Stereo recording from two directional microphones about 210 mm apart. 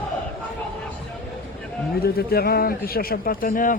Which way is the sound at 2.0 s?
50° left (ahead or behind).